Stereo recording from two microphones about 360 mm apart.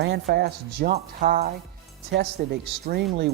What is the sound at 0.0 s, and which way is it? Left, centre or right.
Speech, right.